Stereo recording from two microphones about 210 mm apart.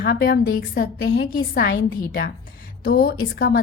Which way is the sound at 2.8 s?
45° left (ahead or behind).